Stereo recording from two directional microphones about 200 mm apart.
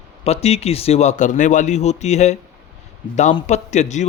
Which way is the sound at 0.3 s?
30° left (ahead or behind).